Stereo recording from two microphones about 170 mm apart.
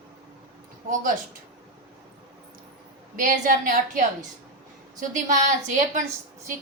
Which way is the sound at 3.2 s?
55° right (ahead or behind).